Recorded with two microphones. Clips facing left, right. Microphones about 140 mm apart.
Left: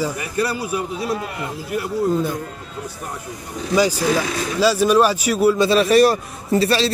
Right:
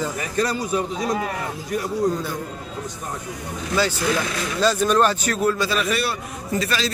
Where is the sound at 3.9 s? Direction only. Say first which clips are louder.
Left 3 dB; 40° left (ahead or behind).